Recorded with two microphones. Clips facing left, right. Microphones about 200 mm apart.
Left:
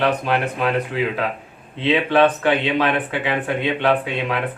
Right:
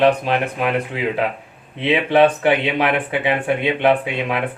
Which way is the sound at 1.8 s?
15° right (ahead or behind).